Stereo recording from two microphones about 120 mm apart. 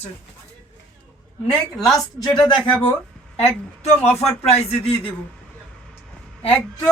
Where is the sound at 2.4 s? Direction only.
40° left (ahead or behind).